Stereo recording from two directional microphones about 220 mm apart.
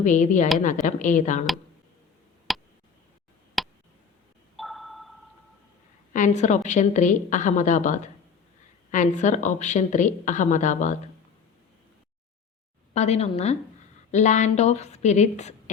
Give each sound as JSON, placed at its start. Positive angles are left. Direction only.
{"t": 0.0, "sound": "a woman's voice", "side_deg": 35}
{"t": 2.5, "sound": "a sound", "side_deg": 0}
{"t": 6.1, "sound": "a woman's voice", "side_deg": 35}
{"t": 12.9, "sound": "a woman's voice", "side_deg": 30}